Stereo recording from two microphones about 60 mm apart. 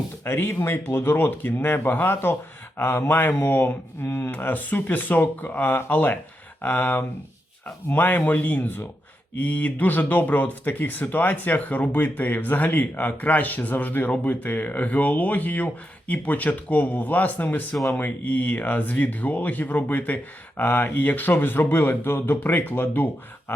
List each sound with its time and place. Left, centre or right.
0.3 s speech: left
4.0 s speech: left
4.3 s speech: left
9.4 s speech: left